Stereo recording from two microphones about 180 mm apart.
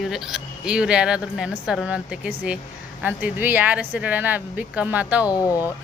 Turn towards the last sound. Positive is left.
turn(degrees=20)  # may be behind; listen again after turning